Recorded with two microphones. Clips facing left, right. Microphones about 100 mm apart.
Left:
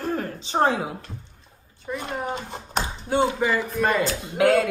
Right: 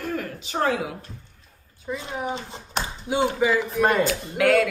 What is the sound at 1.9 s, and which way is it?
A woman's voice, 5° left (ahead or behind).